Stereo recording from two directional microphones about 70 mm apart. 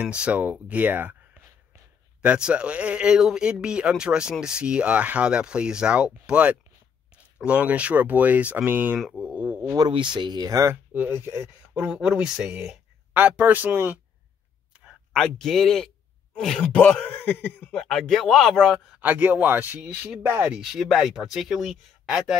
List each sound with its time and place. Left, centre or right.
0.0 s speech: centre
2.2 s a man's voice: centre
9.2 s a sound: right
10.1 s speech: right
10.5 s speech: right
10.9 s speech: right
11.4 s a man's voice: centre
13.1 s speech: right
15.1 s speech: centre
17.0 s a sound: left
17.7 s speech: centre
18.9 s speech: right
19.8 s a man's voice: centre